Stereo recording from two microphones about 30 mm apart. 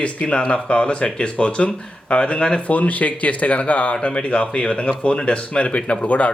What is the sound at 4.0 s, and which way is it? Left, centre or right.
Speech, left.